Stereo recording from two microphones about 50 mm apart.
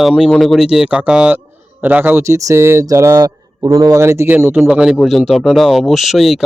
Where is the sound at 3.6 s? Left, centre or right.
Right.